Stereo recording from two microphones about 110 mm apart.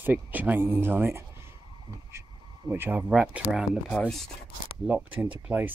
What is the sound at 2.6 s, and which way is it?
Speech, 20° right (ahead or behind).